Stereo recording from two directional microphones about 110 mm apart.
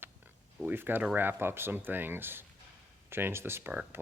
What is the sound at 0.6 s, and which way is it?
Speech, 20° right (ahead or behind).